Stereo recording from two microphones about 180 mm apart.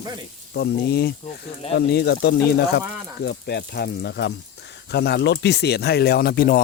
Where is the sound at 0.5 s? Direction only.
65° left (ahead or behind).